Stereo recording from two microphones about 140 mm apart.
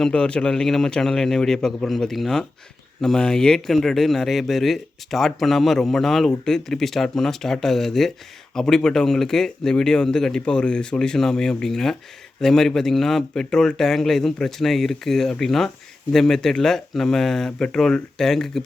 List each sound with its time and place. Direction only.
0.0 s speech: 5° left (ahead or behind)